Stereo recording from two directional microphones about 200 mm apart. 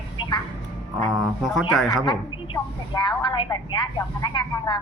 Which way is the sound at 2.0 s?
25° left (ahead or behind).